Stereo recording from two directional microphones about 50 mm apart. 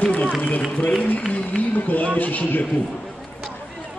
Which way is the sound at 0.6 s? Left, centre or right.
Centre.